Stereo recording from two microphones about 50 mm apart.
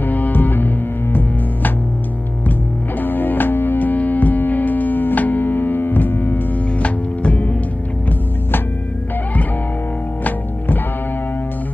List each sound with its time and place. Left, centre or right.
0.0 s music: left
3.0 s music: left
6.8 s music: left